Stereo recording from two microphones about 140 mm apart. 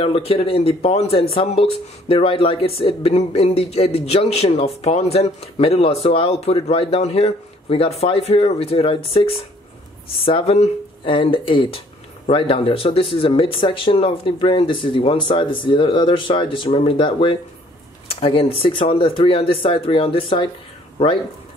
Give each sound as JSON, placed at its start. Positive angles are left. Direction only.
{"t": 0.0, "sound": "speech", "side_deg": 40}